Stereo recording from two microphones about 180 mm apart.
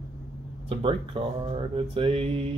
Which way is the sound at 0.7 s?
30° right (ahead or behind).